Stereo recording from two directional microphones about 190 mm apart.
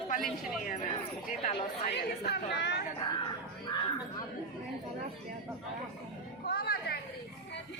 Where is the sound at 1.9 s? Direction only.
60° left (ahead or behind).